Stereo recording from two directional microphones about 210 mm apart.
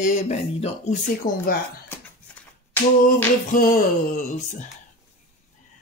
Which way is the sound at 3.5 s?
40° left (ahead or behind).